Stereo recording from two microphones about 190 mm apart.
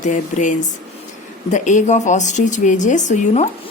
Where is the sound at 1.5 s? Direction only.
40° left (ahead or behind).